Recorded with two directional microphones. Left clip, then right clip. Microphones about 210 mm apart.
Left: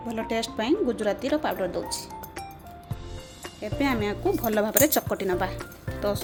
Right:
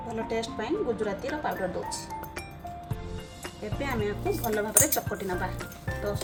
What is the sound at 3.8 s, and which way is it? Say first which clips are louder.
Speech: left 4 dB; 45° left (ahead or behind).